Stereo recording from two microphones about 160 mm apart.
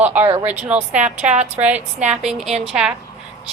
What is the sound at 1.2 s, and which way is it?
Speech, 45° right (ahead or behind).